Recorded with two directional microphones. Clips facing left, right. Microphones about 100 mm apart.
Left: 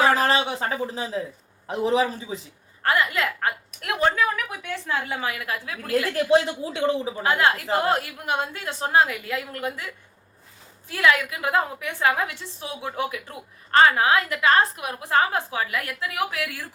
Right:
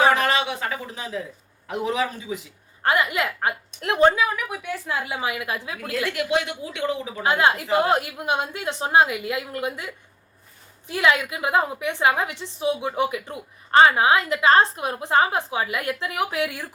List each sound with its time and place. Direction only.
0.1 s a sound: 35° left (ahead or behind)
1.6 s speech: 30° left (ahead or behind)
2.8 s a woman's voice: 20° right (ahead or behind)
4.1 s a woman's voice: 10° right (ahead or behind)
6.1 s speech: 35° left (ahead or behind)
7.2 s a woman's voice: 20° right (ahead or behind)